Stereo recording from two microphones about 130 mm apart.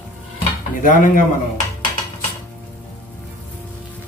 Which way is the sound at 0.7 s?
90° left.